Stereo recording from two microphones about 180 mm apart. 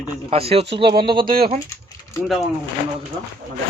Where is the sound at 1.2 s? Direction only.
55° right (ahead or behind).